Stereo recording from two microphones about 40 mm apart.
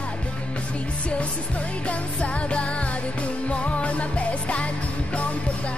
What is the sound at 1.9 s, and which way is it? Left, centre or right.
Music, left.